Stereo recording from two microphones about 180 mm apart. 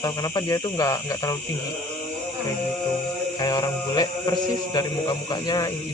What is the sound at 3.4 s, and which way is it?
Speech, 20° left (ahead or behind).